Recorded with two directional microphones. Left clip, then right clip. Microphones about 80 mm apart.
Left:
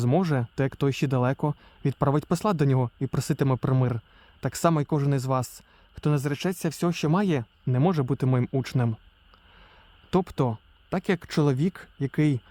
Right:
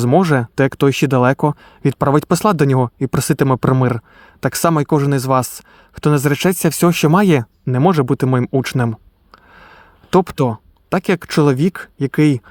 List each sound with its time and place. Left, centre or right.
0.2 s speech: right
9.6 s a sound: right
10.8 s speech: right